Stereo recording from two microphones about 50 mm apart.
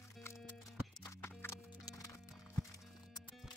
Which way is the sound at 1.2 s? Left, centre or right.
Left.